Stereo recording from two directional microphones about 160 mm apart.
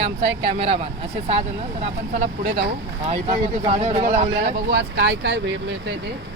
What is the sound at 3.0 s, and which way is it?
Speech, 40° right (ahead or behind).